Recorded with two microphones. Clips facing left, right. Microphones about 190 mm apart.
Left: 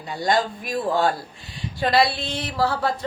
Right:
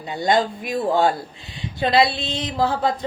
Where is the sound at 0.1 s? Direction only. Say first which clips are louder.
Right 2 dB; 20° right (ahead or behind).